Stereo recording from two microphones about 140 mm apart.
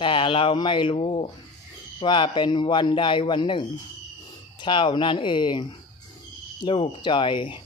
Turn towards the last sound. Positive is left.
turn(degrees=35)  # may be behind; listen again after turning